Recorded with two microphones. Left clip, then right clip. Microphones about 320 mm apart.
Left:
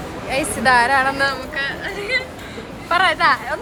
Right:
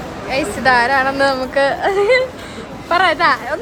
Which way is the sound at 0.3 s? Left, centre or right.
Centre.